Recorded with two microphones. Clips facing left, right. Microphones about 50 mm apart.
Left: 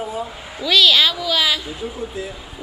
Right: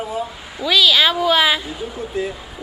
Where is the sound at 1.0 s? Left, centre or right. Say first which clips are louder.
Right 4 dB; right.